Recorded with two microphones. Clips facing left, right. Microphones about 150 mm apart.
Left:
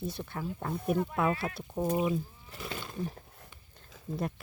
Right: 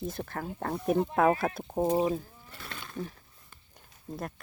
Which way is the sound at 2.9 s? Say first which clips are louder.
Right 3 dB; 40° left (ahead or behind).